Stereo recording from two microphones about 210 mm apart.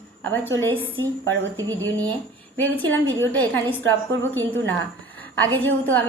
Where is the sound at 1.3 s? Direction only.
60° right (ahead or behind).